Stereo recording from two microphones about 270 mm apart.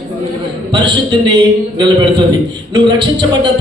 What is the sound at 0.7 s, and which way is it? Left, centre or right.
Speech, centre.